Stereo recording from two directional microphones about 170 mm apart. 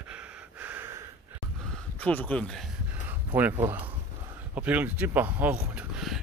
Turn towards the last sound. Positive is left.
turn(degrees=-5)  # may be behind; listen again after turning